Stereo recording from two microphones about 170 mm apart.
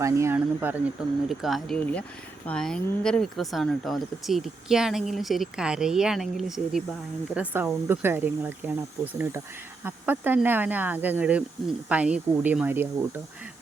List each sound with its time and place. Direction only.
0.0 s speech: 15° right (ahead or behind)